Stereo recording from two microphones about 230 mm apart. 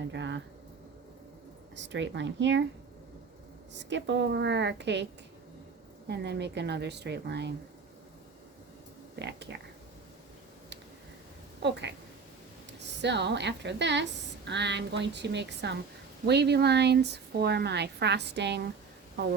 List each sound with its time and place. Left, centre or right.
0.1 s a woman's voice: right
1.7 s a woman's voice: right
3.8 s a woman's voice: right
6.1 s a woman's voice: right
9.1 s a woman's voice: right
11.6 s a woman's voice: right
13.0 s a woman's voice: right